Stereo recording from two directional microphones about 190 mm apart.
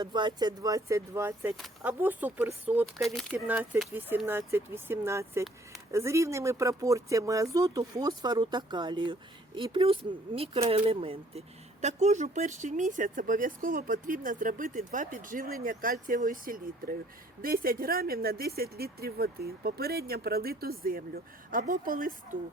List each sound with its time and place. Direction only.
0.0 s speech: 25° right (ahead or behind)
2.8 s speech: centre (ahead or behind)
3.4 s speech: 10° right (ahead or behind); by 22.4 s 45° right (ahead or behind)